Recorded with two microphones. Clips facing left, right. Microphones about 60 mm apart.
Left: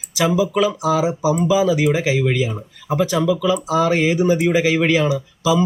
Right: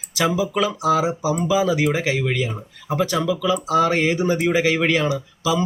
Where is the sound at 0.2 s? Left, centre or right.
Centre.